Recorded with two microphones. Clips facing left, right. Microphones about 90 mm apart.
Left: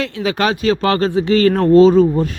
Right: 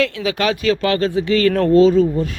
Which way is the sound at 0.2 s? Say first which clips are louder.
Left 2 dB; 40° left (ahead or behind).